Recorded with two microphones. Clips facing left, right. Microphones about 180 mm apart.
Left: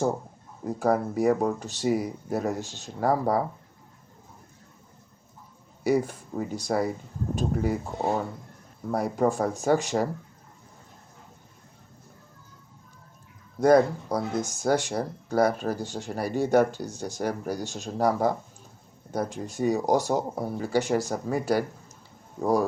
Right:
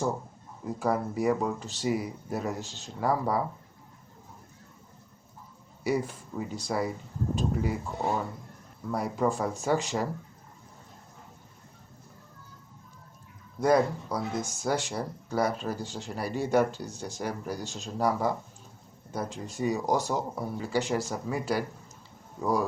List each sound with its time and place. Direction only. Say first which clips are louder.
0.6 s speech: left 4 dB; 50° left (ahead or behind)
5.8 s speech: left 5 dB; 50° left (ahead or behind)
13.6 s speech: left 5 dB; 55° left (ahead or behind)
19.1 s speech: left 5 dB; 55° left (ahead or behind)